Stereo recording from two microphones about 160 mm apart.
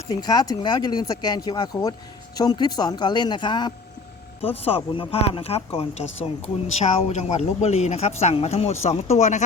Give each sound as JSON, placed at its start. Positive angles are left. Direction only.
{"t": 0.1, "sound": "speech", "side_deg": 25}